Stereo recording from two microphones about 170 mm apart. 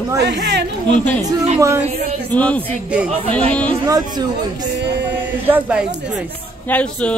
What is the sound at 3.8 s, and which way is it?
Speech, 25° right (ahead or behind).